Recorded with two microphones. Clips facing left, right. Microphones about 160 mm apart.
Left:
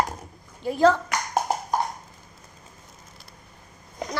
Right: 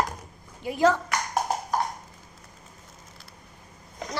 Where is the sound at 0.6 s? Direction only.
15° right (ahead or behind).